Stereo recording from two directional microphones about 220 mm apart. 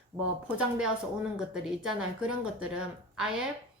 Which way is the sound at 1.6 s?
Centre (ahead or behind).